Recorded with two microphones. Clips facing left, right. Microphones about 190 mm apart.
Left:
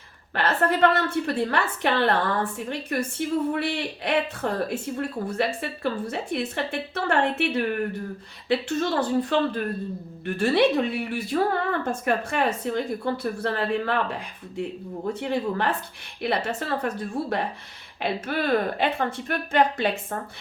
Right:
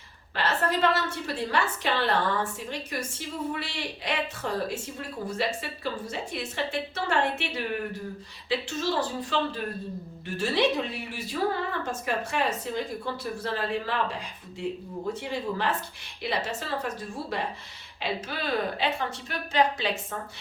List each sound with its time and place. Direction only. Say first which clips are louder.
0.3 s a woman's voice: left 4 dB; 55° left (ahead or behind)